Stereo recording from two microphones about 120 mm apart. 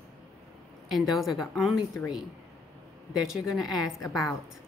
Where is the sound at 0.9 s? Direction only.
Centre (ahead or behind).